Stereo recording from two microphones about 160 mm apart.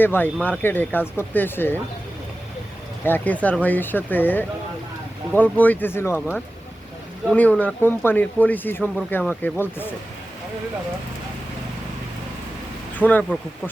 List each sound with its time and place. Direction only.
0.0 s speech: 10° left (ahead or behind)
3.0 s speech: 10° left (ahead or behind)
13.0 s speech: 10° left (ahead or behind)